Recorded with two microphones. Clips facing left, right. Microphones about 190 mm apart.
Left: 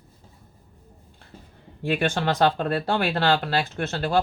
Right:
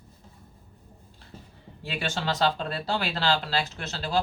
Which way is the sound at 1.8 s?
55° left (ahead or behind).